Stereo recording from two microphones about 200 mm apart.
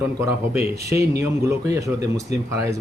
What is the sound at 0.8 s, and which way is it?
Speech, 15° right (ahead or behind).